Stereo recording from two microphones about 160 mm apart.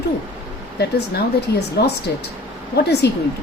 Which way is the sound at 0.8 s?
90° left.